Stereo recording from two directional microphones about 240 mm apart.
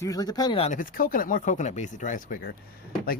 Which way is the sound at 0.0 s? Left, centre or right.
Centre.